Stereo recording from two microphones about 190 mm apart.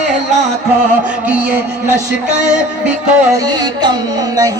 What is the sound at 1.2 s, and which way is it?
Speech, 10° right (ahead or behind).